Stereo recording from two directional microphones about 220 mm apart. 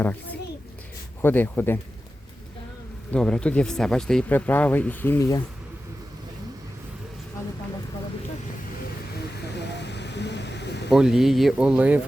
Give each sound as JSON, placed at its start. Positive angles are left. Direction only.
{"t": 0.0, "sound": "speech", "side_deg": 10}
{"t": 3.1, "sound": "speech", "side_deg": 5}
{"t": 9.7, "sound": "vehicle", "side_deg": 50}
{"t": 10.9, "sound": "speech", "side_deg": 0}